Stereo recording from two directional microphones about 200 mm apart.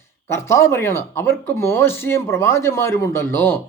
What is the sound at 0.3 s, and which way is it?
Speech, 15° left (ahead or behind).